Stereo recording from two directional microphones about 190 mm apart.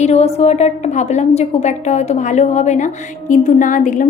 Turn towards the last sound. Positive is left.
turn(degrees=40)  # may be behind; listen again after turning